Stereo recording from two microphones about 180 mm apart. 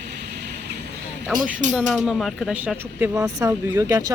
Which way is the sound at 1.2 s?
Centre (ahead or behind).